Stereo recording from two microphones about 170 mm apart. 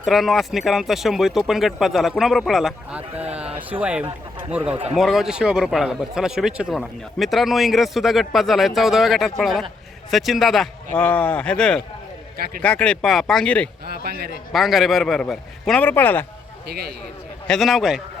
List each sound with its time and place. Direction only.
0.0 s a man's voice: centre (ahead or behind)
13.8 s a man's voice: 65° right (ahead or behind)
14.5 s a man's voice: centre (ahead or behind)
16.6 s a man's voice: 70° right (ahead or behind)
17.4 s a man's voice: centre (ahead or behind)